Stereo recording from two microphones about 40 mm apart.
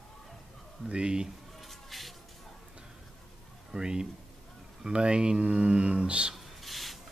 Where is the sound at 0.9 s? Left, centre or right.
Right.